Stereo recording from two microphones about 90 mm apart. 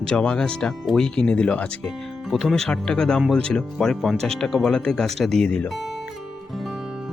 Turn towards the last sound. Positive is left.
turn(degrees=-5)  # may be behind; listen again after turning